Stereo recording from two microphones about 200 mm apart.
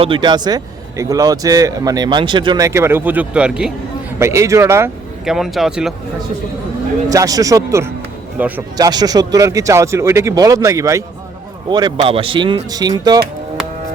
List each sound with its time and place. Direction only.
0.0 s speech: 25° right (ahead or behind)
5.2 s speech: centre (ahead or behind)
7.1 s speech: 15° right (ahead or behind)
8.9 s speech: 20° right (ahead or behind)